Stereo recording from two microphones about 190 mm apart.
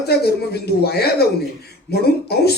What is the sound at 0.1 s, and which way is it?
Speech, 55° left (ahead or behind).